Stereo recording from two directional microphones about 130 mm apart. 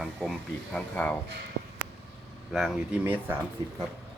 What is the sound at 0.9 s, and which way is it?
Speech, 10° left (ahead or behind).